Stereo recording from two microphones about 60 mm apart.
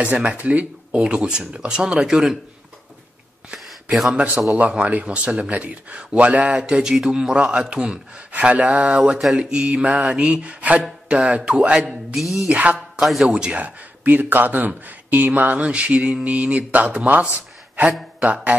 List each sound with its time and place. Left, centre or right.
0.2 s speech: right
4.1 s speech: centre
8.3 s speech: right
12.1 s speech: centre
12.4 s speech: right
13.0 s speech: centre
13.3 s speech: centre
13.6 s speech: right